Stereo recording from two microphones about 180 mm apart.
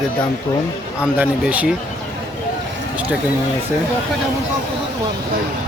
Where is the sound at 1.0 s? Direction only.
5° right (ahead or behind).